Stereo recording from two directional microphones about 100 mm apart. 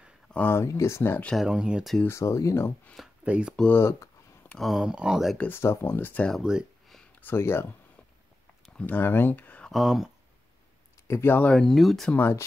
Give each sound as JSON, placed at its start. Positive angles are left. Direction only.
{"t": 0.3, "sound": "speech", "side_deg": 20}
{"t": 1.3, "sound": "speech", "side_deg": -5}
{"t": 2.0, "sound": "speech", "side_deg": 30}
{"t": 3.3, "sound": "speech", "side_deg": -10}
{"t": 3.7, "sound": "a sound", "side_deg": 25}
{"t": 4.6, "sound": "speech", "side_deg": 0}
{"t": 5.4, "sound": "speech", "side_deg": 25}
{"t": 8.8, "sound": "speech", "side_deg": 20}
{"t": 9.7, "sound": "speech", "side_deg": 0}
{"t": 11.1, "sound": "speech", "side_deg": 25}
{"t": 12.2, "sound": "speech", "side_deg": 25}